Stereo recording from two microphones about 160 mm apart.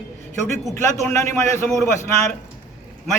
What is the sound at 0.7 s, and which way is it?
A man's voice, 15° left (ahead or behind).